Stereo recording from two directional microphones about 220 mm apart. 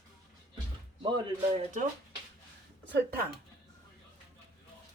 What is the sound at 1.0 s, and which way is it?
Speech, 20° right (ahead or behind).